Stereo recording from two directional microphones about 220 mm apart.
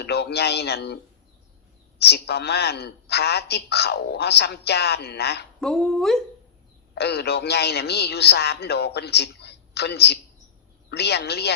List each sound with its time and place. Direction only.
0.0 s a man's voice: 50° left (ahead or behind)
2.0 s a woman's voice: 50° left (ahead or behind)
5.5 s speech: centre (ahead or behind)
6.9 s a woman's voice: 50° left (ahead or behind)